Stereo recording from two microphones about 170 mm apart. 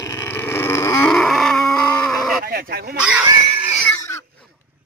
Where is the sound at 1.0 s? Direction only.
Centre (ahead or behind).